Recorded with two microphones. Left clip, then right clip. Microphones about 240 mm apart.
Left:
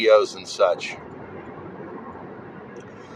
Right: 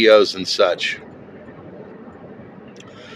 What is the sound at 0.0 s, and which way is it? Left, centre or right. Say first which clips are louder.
Speech: right 4 dB; right.